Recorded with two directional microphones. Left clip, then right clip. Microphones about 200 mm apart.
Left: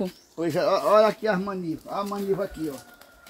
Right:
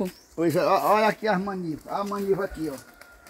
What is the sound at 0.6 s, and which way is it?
Speech, 50° right (ahead or behind).